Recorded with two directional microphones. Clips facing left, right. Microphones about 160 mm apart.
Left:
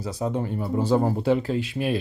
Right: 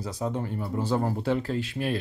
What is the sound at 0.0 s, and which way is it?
Speech, 10° left (ahead or behind).